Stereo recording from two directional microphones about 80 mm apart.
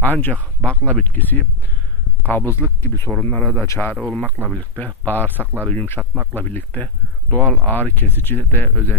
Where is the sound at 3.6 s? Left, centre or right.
Left.